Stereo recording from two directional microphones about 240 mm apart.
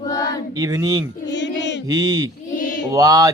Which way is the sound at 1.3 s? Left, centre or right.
Left.